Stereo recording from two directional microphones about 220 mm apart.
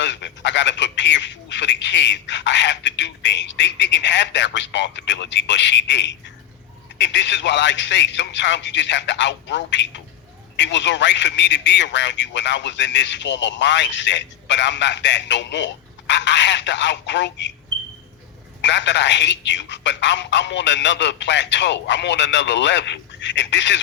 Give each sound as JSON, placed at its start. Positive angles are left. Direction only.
{"t": 0.0, "sound": "a man's voice", "side_deg": 55}
{"t": 18.6, "sound": "a man's voice", "side_deg": 55}